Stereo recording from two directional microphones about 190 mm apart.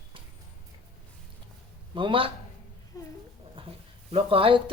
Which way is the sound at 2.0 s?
25° right (ahead or behind).